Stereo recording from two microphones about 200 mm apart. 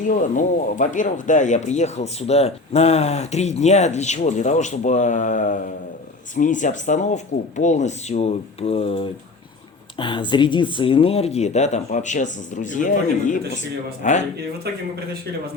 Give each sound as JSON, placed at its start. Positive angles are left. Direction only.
{"t": 0.0, "sound": "speech", "side_deg": 40}